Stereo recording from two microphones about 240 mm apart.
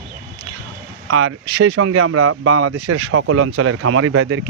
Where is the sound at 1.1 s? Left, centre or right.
Right.